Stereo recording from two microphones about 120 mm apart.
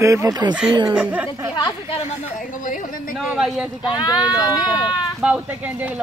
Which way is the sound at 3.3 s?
5° right (ahead or behind).